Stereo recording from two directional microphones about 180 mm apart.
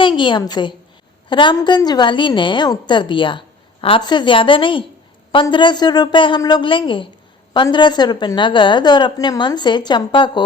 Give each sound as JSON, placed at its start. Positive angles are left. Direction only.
{"t": 0.0, "sound": "a woman's voice", "side_deg": 25}